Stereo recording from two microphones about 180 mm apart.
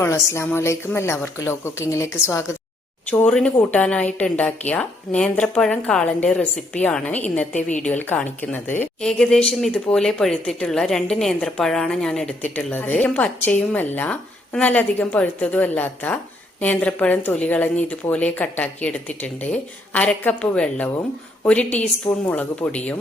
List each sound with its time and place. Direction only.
0.0 s speech: 15° left (ahead or behind)